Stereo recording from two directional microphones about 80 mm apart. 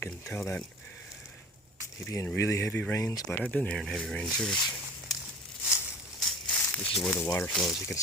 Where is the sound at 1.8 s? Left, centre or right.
Left.